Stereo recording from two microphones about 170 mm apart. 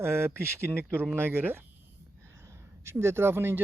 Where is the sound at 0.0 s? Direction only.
15° right (ahead or behind).